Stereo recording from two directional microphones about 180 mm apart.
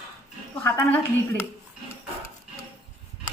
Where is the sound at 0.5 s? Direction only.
10° left (ahead or behind).